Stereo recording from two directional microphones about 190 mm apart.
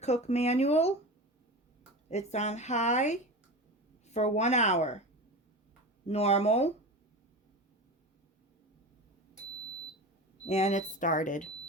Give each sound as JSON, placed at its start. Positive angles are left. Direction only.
{"t": 0.0, "sound": "a woman's voice", "side_deg": 35}
{"t": 2.0, "sound": "a woman's voice", "side_deg": 35}
{"t": 6.1, "sound": "a woman's voice", "side_deg": 35}
{"t": 10.4, "sound": "a woman's voice", "side_deg": 35}